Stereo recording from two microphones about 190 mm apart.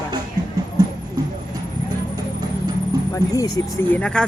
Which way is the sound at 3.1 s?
20° left (ahead or behind).